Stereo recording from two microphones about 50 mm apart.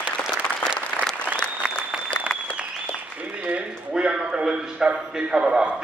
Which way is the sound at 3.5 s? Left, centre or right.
Right.